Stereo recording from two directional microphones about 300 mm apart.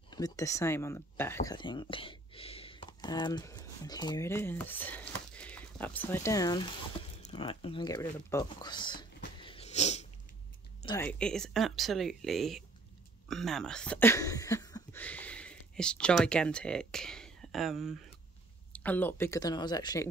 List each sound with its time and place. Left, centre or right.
0.1 s speech: centre
11.0 s speech: centre